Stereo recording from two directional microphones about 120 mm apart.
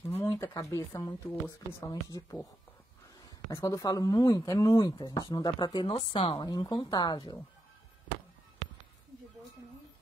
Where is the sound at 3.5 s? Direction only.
25° left (ahead or behind).